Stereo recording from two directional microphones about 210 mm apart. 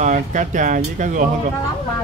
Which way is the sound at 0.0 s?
35° right (ahead or behind).